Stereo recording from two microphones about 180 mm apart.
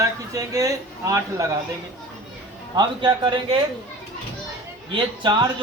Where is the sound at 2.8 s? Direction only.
25° right (ahead or behind).